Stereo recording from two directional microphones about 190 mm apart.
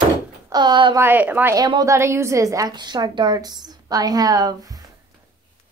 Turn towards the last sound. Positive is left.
turn(degrees=-20)  # may be behind; listen again after turning